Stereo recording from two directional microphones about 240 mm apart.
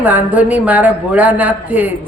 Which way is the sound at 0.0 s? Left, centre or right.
Centre.